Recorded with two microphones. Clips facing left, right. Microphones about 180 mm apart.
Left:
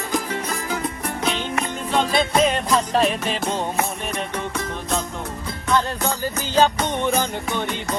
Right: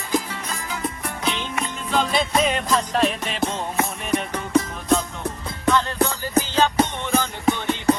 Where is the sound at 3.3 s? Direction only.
30° left (ahead or behind).